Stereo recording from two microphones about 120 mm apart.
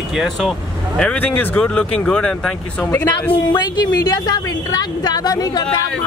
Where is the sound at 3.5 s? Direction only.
35° left (ahead or behind).